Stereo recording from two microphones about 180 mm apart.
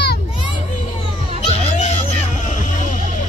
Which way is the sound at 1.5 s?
35° left (ahead or behind).